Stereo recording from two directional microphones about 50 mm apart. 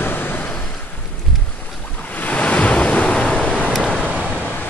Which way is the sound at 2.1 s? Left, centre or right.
Left.